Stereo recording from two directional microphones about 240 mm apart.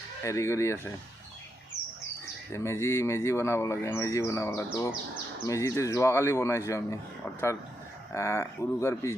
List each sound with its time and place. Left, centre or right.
0.2 s speech: centre
2.5 s speech: centre
8.1 s speech: centre